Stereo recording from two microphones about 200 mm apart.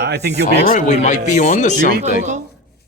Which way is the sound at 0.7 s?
35° left (ahead or behind).